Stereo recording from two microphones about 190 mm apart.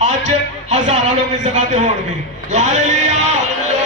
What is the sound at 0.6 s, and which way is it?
Speech, 35° right (ahead or behind).